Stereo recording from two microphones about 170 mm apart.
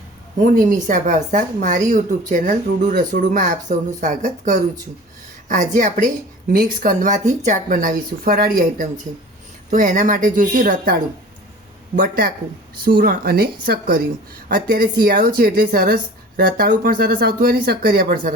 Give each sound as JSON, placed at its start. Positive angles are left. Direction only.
{"t": 0.3, "sound": "speech", "side_deg": -50}
{"t": 11.9, "sound": "speech", "side_deg": -60}